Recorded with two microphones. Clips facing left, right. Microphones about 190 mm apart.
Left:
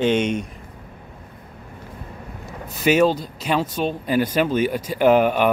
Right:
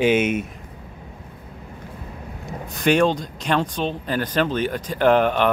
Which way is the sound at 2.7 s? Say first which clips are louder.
Left 1 dB; 5° left (ahead or behind).